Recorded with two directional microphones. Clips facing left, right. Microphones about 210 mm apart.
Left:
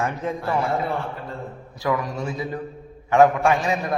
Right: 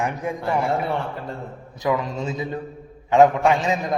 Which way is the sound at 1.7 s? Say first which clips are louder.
Right 1 dB; 20° right (ahead or behind).